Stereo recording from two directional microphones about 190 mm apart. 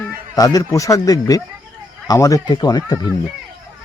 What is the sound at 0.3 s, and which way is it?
Speech, 20° left (ahead or behind).